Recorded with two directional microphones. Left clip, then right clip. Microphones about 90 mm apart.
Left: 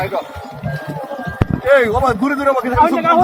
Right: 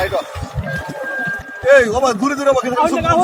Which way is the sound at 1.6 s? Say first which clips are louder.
Right 1 dB; 65° right (ahead or behind).